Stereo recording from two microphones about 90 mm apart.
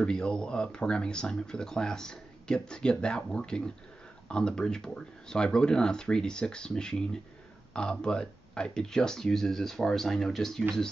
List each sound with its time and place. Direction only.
0.0 s speech: 10° left (ahead or behind)